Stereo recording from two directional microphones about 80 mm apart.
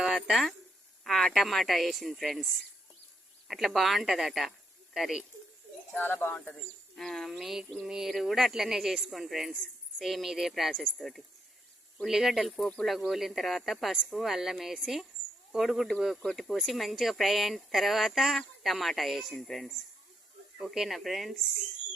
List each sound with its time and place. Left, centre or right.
0.2 s speech: centre
5.9 s speech: left
6.5 s speech: centre
15.5 s speech: centre